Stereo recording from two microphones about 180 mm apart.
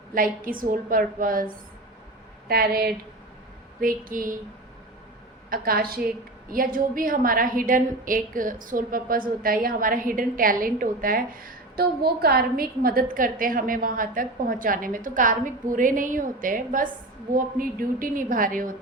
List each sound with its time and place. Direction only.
0.1 s a woman's voice: 50° right (ahead or behind)
2.5 s a woman's voice: 60° right (ahead or behind)
5.5 s a woman's voice: 55° right (ahead or behind)